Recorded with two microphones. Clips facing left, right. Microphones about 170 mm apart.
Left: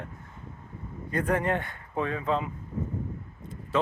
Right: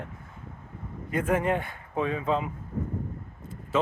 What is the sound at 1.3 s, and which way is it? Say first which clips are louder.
Speech: right 2 dB; 10° right (ahead or behind).